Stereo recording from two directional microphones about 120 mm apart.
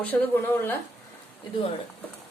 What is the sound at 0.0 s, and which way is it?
Speech, 15° left (ahead or behind).